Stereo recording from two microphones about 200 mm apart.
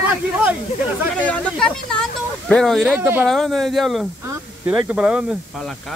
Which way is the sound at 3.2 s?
Centre (ahead or behind).